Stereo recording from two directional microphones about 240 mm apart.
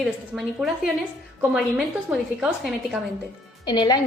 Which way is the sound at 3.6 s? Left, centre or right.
Centre.